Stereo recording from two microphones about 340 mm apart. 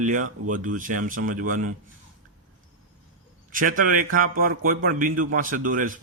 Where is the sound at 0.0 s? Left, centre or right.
Right.